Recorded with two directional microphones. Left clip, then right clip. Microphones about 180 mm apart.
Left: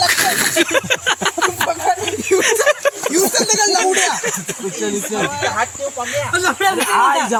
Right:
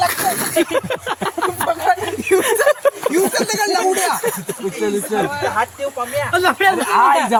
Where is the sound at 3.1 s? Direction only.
Centre (ahead or behind).